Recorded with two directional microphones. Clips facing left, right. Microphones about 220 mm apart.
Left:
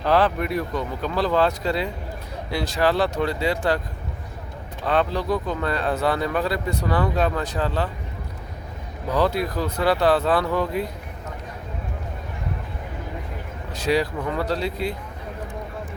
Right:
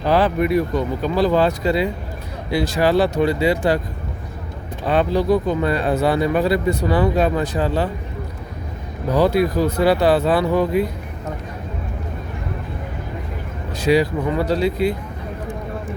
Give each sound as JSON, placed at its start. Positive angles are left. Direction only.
{"t": 0.0, "sound": "speech", "side_deg": -5}
{"t": 4.9, "sound": "speech", "side_deg": -10}
{"t": 9.1, "sound": "speech", "side_deg": -5}
{"t": 13.8, "sound": "speech", "side_deg": 0}